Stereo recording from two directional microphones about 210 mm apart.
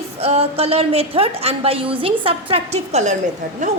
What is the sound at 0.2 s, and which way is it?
A woman's voice, 30° right (ahead or behind).